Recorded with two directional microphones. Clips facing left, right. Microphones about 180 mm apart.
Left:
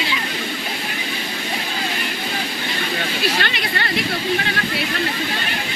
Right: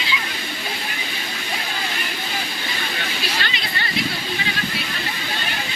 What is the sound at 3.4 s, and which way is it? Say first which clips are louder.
Chatter: left 4 dB; 55° left (ahead or behind).